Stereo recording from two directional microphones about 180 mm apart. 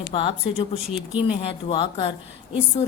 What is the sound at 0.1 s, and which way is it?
A woman's voice, 30° left (ahead or behind).